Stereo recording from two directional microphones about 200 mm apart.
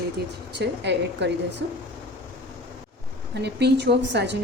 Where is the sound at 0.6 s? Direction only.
60° right (ahead or behind).